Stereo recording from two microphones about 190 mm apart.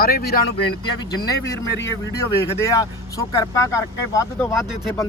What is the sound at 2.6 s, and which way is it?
Speech, 15° left (ahead or behind).